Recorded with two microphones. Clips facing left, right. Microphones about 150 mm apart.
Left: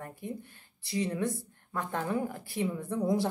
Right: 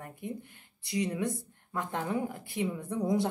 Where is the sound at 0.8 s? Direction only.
25° left (ahead or behind).